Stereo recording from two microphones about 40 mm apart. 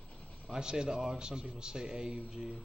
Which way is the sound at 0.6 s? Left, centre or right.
Centre.